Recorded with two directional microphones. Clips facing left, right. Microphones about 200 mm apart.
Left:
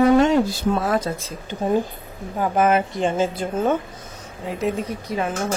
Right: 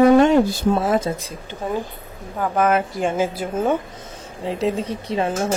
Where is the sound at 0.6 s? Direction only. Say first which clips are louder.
Right 2 dB; 25° right (ahead or behind).